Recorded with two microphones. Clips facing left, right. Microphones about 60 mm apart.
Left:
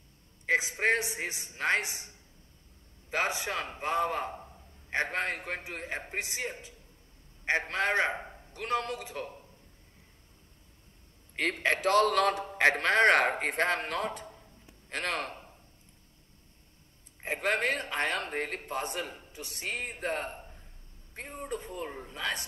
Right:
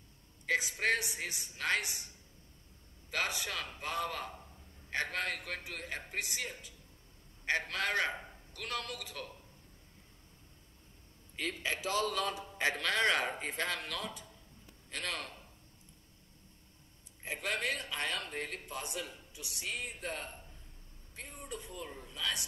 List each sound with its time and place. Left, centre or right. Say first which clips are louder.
0.5 s a man's voice: left 5 dB; left
11.3 s a man's voice: left 8 dB; left
12.8 s speech: left 7 dB; left
13.1 s a man's voice: left 8 dB; left
13.7 s a man's voice: left 8 dB; left
17.2 s a man's voice: left 7 dB; left